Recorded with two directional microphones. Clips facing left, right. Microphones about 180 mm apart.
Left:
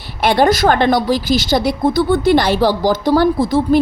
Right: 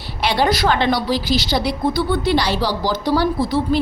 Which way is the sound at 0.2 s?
50° left (ahead or behind).